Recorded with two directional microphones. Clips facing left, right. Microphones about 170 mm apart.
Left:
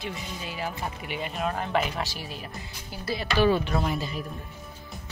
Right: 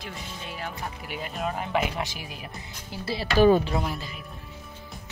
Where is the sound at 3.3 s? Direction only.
45° right (ahead or behind).